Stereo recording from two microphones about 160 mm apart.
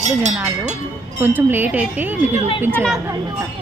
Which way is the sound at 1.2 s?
10° right (ahead or behind).